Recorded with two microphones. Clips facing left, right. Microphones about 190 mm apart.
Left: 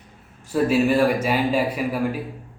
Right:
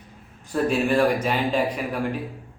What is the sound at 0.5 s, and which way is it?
Speech, 5° left (ahead or behind).